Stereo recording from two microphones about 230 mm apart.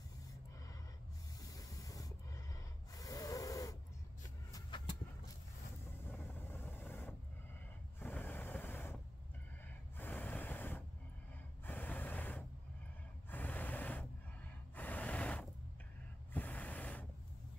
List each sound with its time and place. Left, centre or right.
1.4 s snort: centre
4.5 s a sound: centre
6.1 s vehicle: centre
8.0 s a sound: centre
9.9 s vehicle: centre
11.6 s a sound: centre
13.3 s gasp: centre
14.8 s vehicle: centre
16.3 s gasp: centre